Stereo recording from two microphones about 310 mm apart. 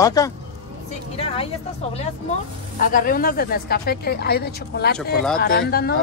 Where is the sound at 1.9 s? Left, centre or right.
Left.